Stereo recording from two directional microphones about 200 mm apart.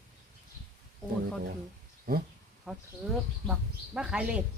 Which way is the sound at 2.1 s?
45° right (ahead or behind).